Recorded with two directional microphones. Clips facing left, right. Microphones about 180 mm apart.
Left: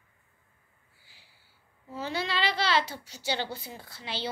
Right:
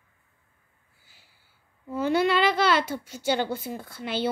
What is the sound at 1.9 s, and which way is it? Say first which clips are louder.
A child's voice: right 10 dB; 50° right (ahead or behind).